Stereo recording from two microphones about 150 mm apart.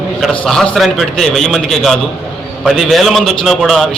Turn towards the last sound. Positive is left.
turn(degrees=0)  # may be behind; listen again after turning